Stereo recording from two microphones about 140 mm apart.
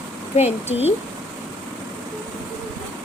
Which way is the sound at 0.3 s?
50° left (ahead or behind).